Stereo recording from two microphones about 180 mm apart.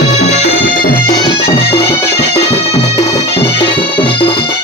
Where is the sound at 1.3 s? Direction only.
30° left (ahead or behind).